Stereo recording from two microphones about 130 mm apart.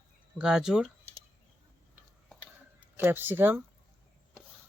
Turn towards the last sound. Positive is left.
turn(degrees=-15)  # may be behind; listen again after turning